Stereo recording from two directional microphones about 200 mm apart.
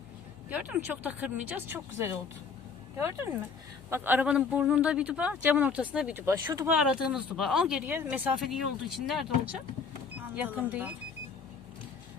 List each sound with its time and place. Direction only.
0.5 s speech: 5° right (ahead or behind)
6.7 s speech: 5° right (ahead or behind)